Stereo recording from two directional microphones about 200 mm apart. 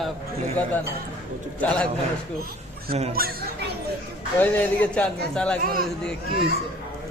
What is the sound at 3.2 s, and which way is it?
Speech, 45° right (ahead or behind).